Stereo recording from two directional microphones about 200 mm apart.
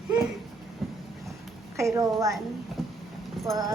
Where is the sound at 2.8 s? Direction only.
Centre (ahead or behind).